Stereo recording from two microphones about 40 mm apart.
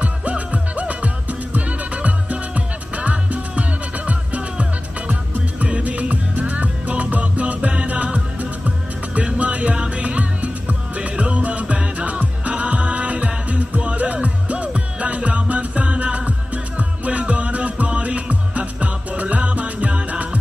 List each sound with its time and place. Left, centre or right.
0.0 s music: right